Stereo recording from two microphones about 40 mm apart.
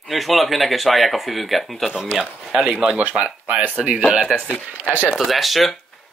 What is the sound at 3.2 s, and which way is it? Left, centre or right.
Speech, right.